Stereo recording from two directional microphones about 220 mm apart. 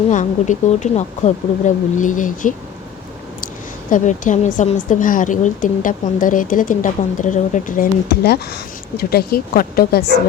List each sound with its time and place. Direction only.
0.1 s a woman's voice: 35° left (ahead or behind)